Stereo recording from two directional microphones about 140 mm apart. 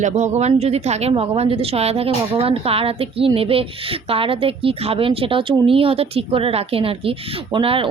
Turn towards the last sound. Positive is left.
turn(degrees=-40)  # may be behind; listen again after turning